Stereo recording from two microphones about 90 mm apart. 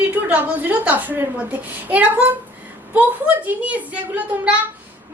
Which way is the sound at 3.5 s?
15° right (ahead or behind).